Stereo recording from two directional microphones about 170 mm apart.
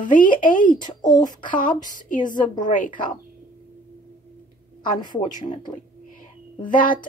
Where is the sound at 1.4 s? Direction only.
50° left (ahead or behind).